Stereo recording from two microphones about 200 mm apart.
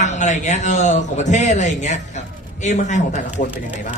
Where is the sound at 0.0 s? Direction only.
35° left (ahead or behind).